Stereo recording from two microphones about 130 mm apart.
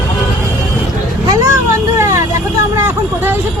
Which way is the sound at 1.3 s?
25° right (ahead or behind).